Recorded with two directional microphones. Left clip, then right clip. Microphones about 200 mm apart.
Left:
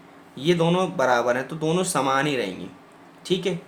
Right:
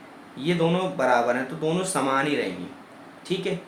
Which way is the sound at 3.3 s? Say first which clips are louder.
Left 4 dB; 35° left (ahead or behind).